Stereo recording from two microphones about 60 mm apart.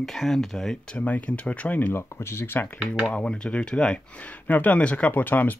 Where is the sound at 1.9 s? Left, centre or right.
Left.